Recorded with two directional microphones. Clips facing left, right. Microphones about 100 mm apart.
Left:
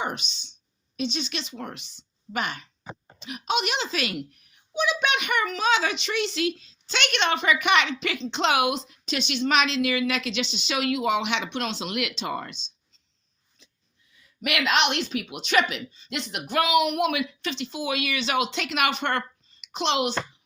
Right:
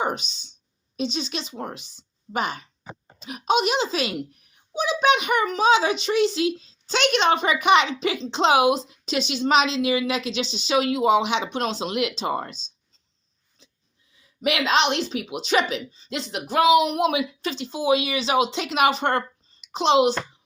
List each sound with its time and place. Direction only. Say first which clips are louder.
0.0 s speech: right 5 dB; 40° right (ahead or behind)
14.4 s a child's voice: right 3 dB; 30° right (ahead or behind)